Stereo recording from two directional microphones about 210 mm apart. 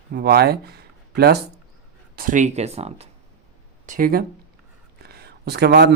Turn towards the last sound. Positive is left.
turn(degrees=-50)  # may be behind; listen again after turning